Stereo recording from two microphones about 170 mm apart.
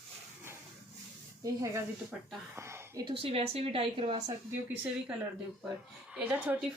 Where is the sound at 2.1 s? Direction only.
10° right (ahead or behind).